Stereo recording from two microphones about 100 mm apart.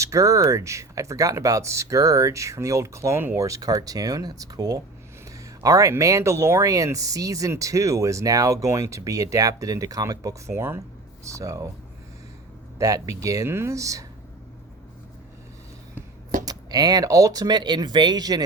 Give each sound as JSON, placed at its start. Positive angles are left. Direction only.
{"t": 0.0, "sound": "speech", "side_deg": -30}
{"t": 12.8, "sound": "speech", "side_deg": -35}
{"t": 16.5, "sound": "speech", "side_deg": -40}